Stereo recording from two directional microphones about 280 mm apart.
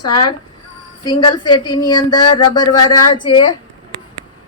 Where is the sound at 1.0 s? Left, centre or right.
Centre.